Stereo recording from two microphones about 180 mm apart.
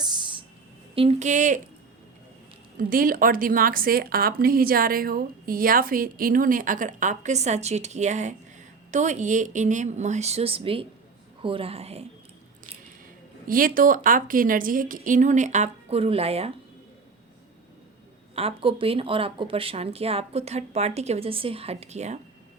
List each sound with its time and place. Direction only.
0.0 s music: 25° right (ahead or behind)
0.9 s a woman's voice: 35° right (ahead or behind)
2.7 s a woman's voice: 50° right (ahead or behind); by 12.0 s 35° right (ahead or behind)
13.5 s a woman's voice: 50° right (ahead or behind); by 16.5 s 35° right (ahead or behind)
18.3 s speech: 30° right (ahead or behind)